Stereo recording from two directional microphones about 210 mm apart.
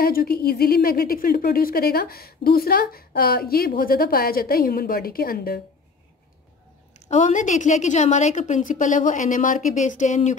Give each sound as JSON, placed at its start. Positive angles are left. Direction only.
{"t": 0.0, "sound": "a woman's voice", "side_deg": 45}
{"t": 7.1, "sound": "a woman's voice", "side_deg": 35}